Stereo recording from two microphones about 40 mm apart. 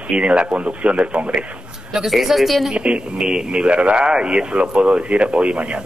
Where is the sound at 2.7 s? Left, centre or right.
Right.